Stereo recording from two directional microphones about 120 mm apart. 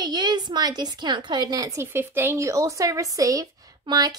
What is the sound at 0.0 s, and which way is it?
A woman's voice, 35° right (ahead or behind).